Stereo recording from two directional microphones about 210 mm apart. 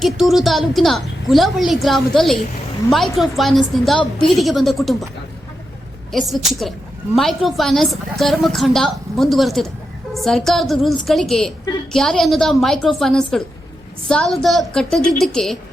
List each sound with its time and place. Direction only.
0.0 s a woman's voice: centre (ahead or behind)
6.1 s a woman's voice: centre (ahead or behind)